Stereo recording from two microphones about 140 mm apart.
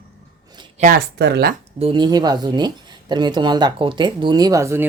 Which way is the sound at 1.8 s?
40° right (ahead or behind).